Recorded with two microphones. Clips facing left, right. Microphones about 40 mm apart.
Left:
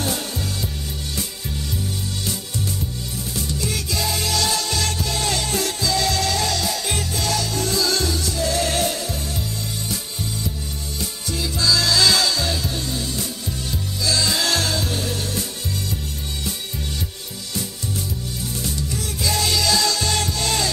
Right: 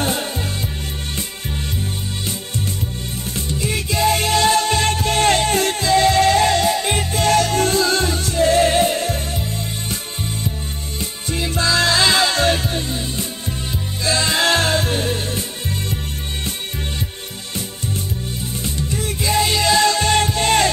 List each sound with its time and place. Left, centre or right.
3.3 s music: right
11.0 s music: right
12.4 s music: right
12.9 s music: right
18.6 s music: right